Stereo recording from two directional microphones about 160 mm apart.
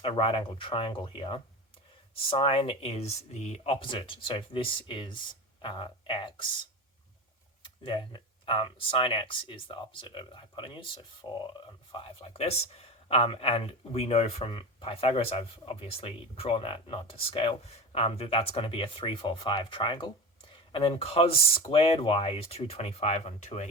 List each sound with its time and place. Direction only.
0.0 s speech: 35° left (ahead or behind)
7.9 s speech: 30° left (ahead or behind)